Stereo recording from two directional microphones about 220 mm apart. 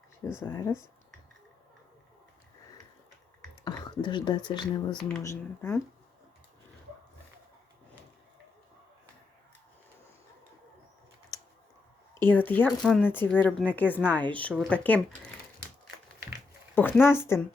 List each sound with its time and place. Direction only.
0.3 s speech: 15° left (ahead or behind)
3.6 s speech: 20° left (ahead or behind)
4.9 s speech: 10° left (ahead or behind)
12.2 s speech: 10° left (ahead or behind)
16.7 s speech: 10° left (ahead or behind)